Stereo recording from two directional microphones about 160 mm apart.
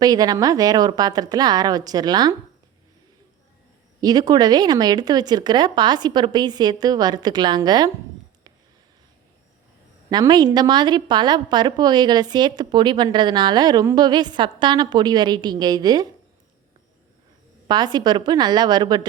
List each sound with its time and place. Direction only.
0.0 s a woman's voice: 25° right (ahead or behind)
4.0 s a woman's voice: 25° right (ahead or behind)
10.1 s a woman's voice: 25° right (ahead or behind)
17.7 s a woman's voice: 25° right (ahead or behind)